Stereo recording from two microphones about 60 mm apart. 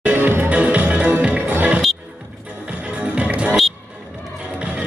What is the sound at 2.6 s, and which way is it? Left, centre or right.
Music, right.